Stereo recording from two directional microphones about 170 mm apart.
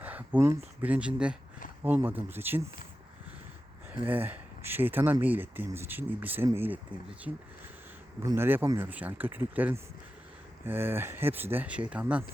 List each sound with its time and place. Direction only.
0.0 s speech: 10° right (ahead or behind)
4.0 s speech: 10° right (ahead or behind)